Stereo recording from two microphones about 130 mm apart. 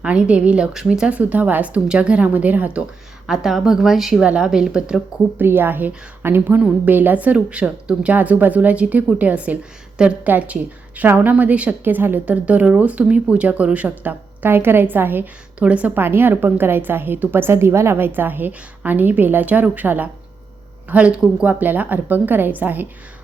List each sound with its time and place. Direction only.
0.0 s a woman's voice: 10° right (ahead or behind)
5.5 s a woman's voice: 15° right (ahead or behind)